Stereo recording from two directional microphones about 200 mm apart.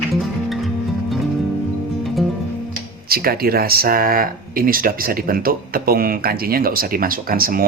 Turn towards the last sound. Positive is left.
turn(degrees=-45)  # may be behind; listen again after turning